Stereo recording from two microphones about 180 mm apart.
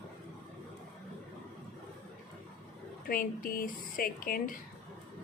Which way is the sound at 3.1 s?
50° left (ahead or behind).